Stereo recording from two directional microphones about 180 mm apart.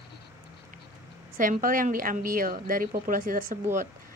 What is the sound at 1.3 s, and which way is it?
A woman's voice, 50° right (ahead or behind).